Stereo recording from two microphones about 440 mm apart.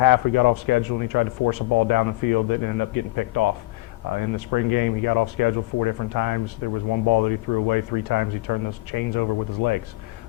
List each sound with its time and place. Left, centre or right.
0.0 s speech: left